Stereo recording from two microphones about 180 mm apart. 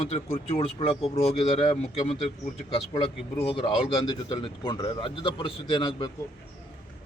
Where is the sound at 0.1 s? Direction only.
35° left (ahead or behind).